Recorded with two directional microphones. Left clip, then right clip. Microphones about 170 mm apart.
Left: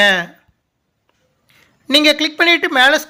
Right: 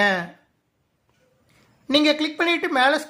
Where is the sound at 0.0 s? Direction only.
20° left (ahead or behind).